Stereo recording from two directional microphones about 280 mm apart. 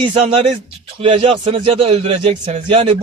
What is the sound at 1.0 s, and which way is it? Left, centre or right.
A man's voice, centre.